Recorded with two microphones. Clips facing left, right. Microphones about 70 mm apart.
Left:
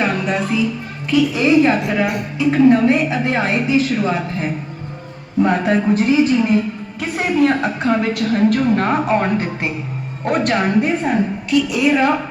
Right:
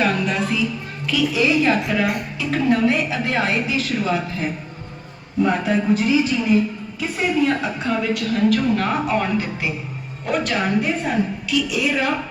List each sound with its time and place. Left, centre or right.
0.0 s music: left
1.1 s a woman's voice: left
5.4 s a woman's voice: left
7.0 s a sound: left
7.9 s a woman's voice: left